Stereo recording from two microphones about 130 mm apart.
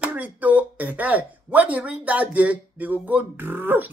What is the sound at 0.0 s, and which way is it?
Speech, 10° right (ahead or behind).